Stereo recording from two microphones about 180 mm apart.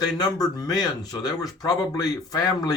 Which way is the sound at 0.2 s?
20° left (ahead or behind).